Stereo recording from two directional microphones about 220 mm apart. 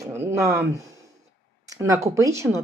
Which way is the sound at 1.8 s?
15° right (ahead or behind).